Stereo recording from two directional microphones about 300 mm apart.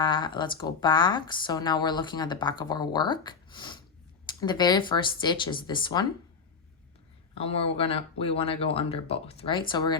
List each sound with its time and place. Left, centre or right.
0.0 s speech: centre
7.3 s speech: centre